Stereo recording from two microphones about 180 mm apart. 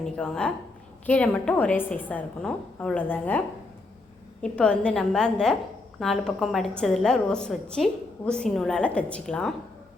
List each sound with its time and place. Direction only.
0.0 s a woman's voice: 5° left (ahead or behind)
4.4 s a woman's voice: 5° left (ahead or behind)